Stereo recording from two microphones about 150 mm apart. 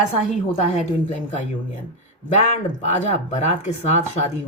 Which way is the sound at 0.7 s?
50° left (ahead or behind).